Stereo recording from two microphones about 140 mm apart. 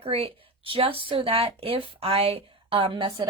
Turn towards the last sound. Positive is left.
turn(degrees=-40)  # may be behind; listen again after turning